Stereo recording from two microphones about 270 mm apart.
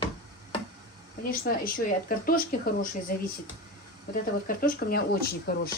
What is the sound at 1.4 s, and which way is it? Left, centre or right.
Speech, left.